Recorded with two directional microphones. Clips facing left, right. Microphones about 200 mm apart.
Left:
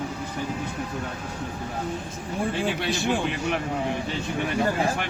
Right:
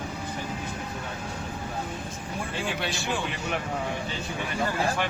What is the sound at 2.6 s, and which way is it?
Speech, 55° left (ahead or behind).